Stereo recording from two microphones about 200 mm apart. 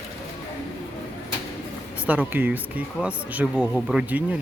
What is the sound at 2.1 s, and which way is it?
Speech, 10° right (ahead or behind).